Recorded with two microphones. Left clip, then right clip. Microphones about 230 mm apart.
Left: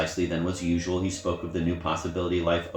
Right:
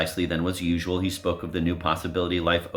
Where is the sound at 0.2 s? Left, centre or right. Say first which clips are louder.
Right 1 dB; right.